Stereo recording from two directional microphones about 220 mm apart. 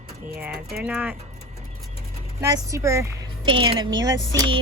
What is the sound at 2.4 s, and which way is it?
Speech, 15° right (ahead or behind).